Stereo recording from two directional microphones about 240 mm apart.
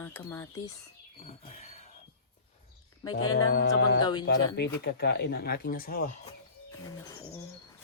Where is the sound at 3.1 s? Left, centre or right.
Left.